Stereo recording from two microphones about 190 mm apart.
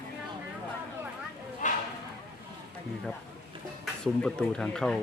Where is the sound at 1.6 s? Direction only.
40° left (ahead or behind).